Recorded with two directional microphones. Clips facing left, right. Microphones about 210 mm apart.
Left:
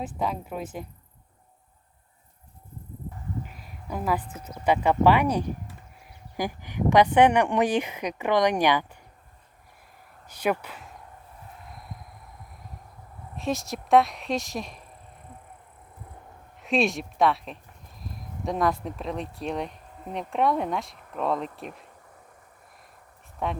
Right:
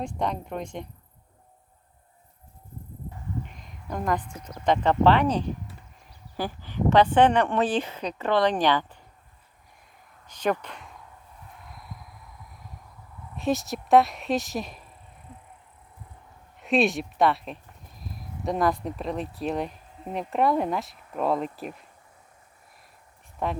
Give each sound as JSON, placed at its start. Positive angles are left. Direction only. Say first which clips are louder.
{"t": 0.0, "sound": "speech", "louder": "right 1 dB", "side_deg": 5}
{"t": 3.4, "sound": "a sound", "louder": "left 1 dB", "side_deg": 5}
{"t": 4.4, "sound": "speech", "louder": "even", "side_deg": 10}
{"t": 10.2, "sound": "speech", "louder": "even", "side_deg": 10}
{"t": 11.7, "sound": "a sound", "louder": "even", "side_deg": 0}
{"t": 13.3, "sound": "speech", "louder": "right 3 dB", "side_deg": 0}
{"t": 16.6, "sound": "speech", "louder": "right 2 dB", "side_deg": 0}
{"t": 23.4, "sound": "speech", "louder": "right 1 dB", "side_deg": 0}